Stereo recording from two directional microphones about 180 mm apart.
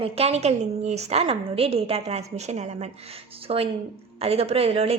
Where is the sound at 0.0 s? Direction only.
35° right (ahead or behind).